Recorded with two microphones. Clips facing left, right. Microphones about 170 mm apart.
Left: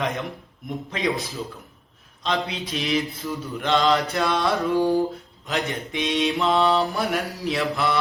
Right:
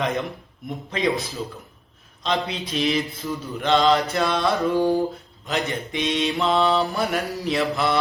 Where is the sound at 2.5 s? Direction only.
10° left (ahead or behind).